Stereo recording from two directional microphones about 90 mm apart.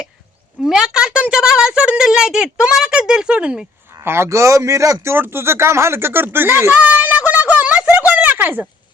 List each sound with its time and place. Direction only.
0.6 s speech: 5° right (ahead or behind)
4.0 s speech: 30° right (ahead or behind)